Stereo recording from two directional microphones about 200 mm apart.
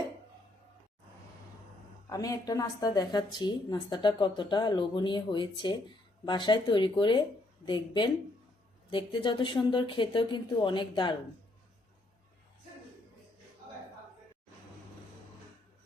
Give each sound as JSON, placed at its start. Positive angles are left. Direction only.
{"t": 2.0, "sound": "a woman's voice", "side_deg": 15}